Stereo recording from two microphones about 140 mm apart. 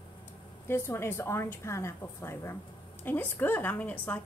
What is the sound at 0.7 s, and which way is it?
A woman's voice, 15° left (ahead or behind).